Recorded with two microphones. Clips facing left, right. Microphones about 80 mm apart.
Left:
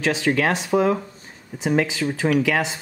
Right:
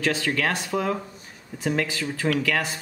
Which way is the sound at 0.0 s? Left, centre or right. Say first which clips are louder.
Left 4 dB; left.